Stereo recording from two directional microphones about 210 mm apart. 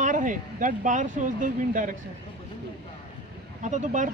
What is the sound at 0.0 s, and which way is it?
Speech, 40° right (ahead or behind).